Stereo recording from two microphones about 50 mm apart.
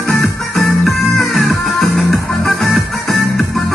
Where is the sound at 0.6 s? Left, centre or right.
Centre.